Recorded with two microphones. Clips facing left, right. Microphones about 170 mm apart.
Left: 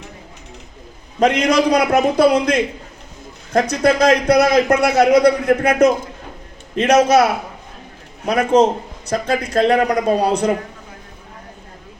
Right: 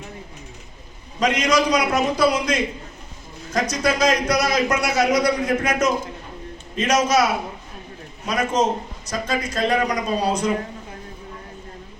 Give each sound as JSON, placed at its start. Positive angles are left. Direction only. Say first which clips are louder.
{"t": 1.2, "sound": "a man's voice", "louder": "left 5 dB", "side_deg": 60}